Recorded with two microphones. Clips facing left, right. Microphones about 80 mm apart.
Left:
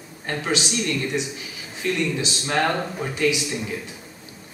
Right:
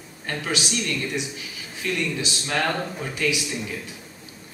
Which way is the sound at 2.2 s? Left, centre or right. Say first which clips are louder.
Left 3 dB; left.